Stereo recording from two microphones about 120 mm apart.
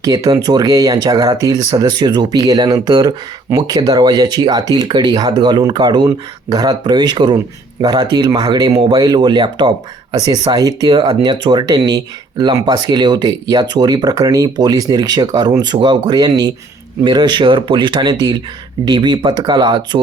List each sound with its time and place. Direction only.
0.0 s speech: 30° right (ahead or behind)